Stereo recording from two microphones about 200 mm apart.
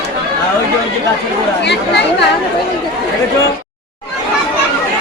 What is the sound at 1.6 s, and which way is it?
Speech, 60° left (ahead or behind).